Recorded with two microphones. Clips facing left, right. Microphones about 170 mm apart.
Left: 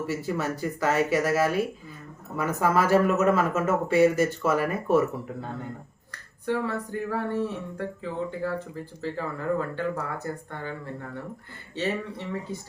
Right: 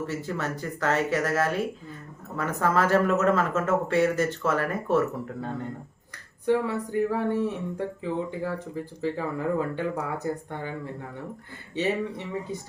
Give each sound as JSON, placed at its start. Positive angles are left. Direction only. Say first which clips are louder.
{"t": 0.1, "sound": "speech", "louder": "left 2 dB", "side_deg": 10}
{"t": 6.4, "sound": "speech", "louder": "right 3 dB", "side_deg": -15}